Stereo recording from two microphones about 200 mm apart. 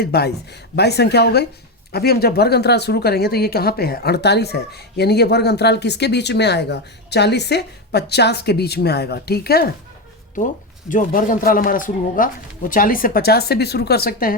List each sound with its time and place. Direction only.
0.0 s speech: 55° left (ahead or behind)
10.3 s speech: 40° left (ahead or behind)